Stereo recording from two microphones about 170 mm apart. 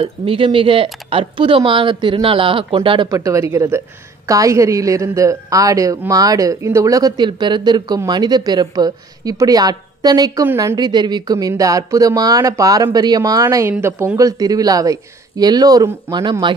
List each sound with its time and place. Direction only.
0.0 s a woman's voice: 30° right (ahead or behind)